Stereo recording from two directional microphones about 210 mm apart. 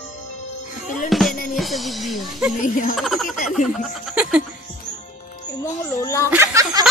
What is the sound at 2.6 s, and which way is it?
Speech, 40° left (ahead or behind).